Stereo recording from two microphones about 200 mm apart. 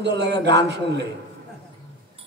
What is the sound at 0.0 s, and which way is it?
A man's voice, 60° right (ahead or behind).